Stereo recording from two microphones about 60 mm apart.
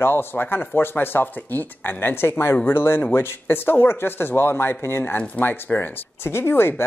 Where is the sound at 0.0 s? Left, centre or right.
Left.